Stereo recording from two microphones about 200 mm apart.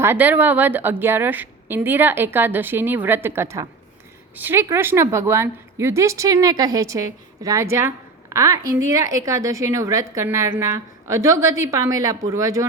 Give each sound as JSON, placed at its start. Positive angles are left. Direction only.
{"t": 0.0, "sound": "a woman's voice", "side_deg": -10}